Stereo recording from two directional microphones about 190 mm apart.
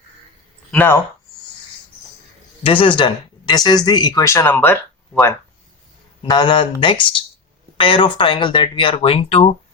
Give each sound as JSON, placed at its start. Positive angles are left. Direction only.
{"t": 0.7, "sound": "speech", "side_deg": 10}
{"t": 2.6, "sound": "speech", "side_deg": 25}
{"t": 6.2, "sound": "speech", "side_deg": 25}